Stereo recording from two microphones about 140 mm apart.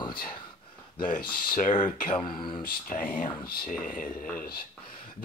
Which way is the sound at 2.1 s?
35° left (ahead or behind).